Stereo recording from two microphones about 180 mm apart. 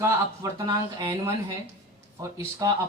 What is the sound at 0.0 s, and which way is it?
Speech, 20° right (ahead or behind).